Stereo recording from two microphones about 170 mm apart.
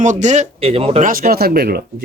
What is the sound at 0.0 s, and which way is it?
Speech, 45° right (ahead or behind).